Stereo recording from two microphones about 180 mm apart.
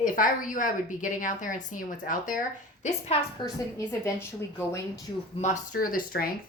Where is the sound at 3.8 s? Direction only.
15° left (ahead or behind).